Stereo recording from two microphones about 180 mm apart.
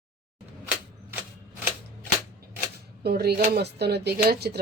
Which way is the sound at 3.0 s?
60° right (ahead or behind).